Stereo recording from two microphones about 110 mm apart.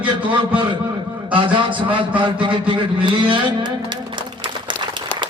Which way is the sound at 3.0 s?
45° right (ahead or behind).